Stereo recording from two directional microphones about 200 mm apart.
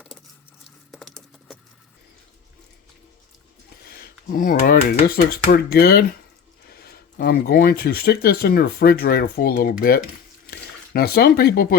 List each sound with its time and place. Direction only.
0.9 s typing: centre (ahead or behind)
3.8 s a sound: 45° left (ahead or behind)
5.0 s speech: 50° left (ahead or behind)